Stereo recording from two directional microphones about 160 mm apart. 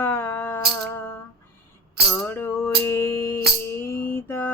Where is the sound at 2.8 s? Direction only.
15° left (ahead or behind).